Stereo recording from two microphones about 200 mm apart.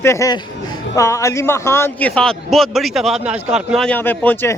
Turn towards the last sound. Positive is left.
turn(degrees=10)  # may be behind; listen again after turning